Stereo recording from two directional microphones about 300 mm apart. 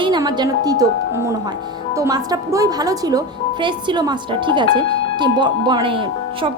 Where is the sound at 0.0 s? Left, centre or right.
Centre.